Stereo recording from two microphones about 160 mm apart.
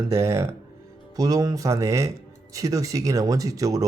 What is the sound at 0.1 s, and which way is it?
Speech, 20° right (ahead or behind).